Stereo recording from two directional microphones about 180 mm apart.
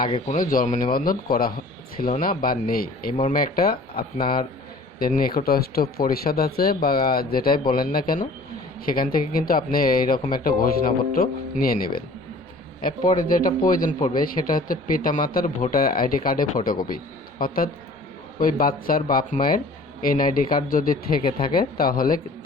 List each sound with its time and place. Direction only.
0.3 s speech: 50° left (ahead or behind)
13.3 s speech: 50° left (ahead or behind)